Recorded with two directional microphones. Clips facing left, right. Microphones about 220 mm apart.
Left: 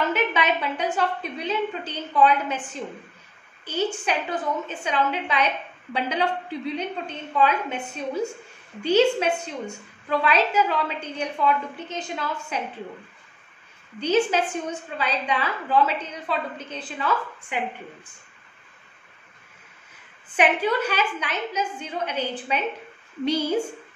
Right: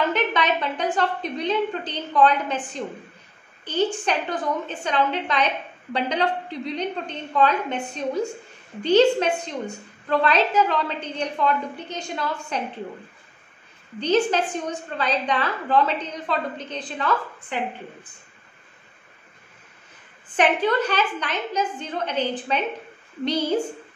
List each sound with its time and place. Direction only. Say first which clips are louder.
0.1 s a woman's voice: right 1 dB; 5° left (ahead or behind)
13.9 s a woman's voice: right 1 dB; 10° left (ahead or behind)
20.3 s a woman's voice: right 1 dB; 10° left (ahead or behind)